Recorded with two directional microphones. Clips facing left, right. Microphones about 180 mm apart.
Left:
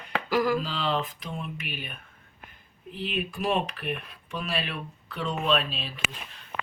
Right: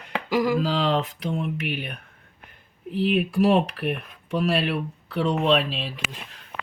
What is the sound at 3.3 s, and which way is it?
Speech, 70° right (ahead or behind).